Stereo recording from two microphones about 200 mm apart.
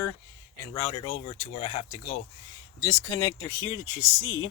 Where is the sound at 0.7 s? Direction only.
25° left (ahead or behind).